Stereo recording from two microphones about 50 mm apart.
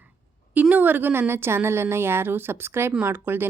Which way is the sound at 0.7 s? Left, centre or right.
Right.